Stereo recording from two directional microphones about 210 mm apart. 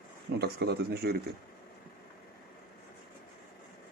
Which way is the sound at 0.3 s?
50° right (ahead or behind).